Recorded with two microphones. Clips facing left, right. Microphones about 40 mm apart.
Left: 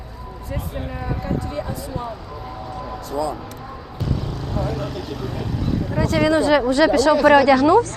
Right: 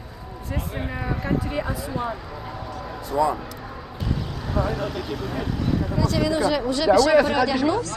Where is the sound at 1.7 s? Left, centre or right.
Centre.